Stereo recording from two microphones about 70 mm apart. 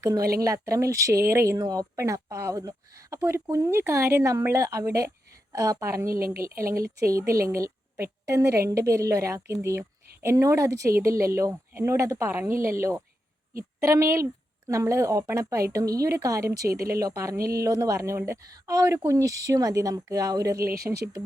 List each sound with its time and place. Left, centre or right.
0.0 s a woman's voice: right
2.0 s a woman's voice: right